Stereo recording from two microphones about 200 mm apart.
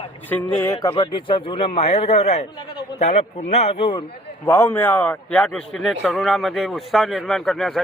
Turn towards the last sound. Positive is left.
turn(degrees=0)  # may be behind; listen again after turning